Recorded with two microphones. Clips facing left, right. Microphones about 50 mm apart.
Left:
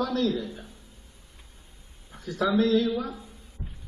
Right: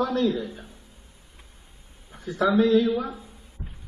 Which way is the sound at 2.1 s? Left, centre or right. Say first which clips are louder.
Right 3 dB; centre.